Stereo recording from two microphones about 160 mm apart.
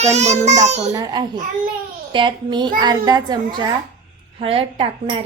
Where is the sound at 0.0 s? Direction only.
45° right (ahead or behind).